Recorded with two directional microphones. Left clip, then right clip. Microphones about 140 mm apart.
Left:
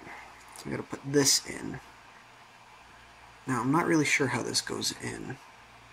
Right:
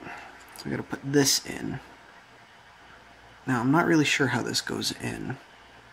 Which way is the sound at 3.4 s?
30° right (ahead or behind).